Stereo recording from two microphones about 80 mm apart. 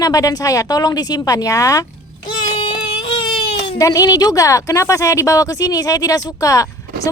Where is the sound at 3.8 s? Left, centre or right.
Left.